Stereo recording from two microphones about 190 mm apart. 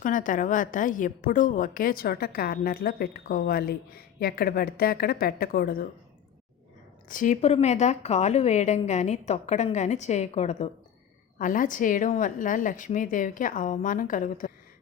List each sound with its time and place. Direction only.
0.0 s a woman's voice: 45° left (ahead or behind)
7.1 s a woman's voice: 45° left (ahead or behind)